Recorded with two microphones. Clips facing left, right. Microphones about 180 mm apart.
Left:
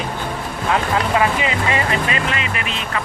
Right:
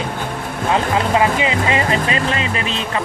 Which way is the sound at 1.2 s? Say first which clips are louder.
Right 2 dB; 25° right (ahead or behind).